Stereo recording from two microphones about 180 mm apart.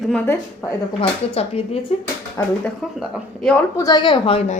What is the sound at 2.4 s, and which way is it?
Speech, 15° left (ahead or behind).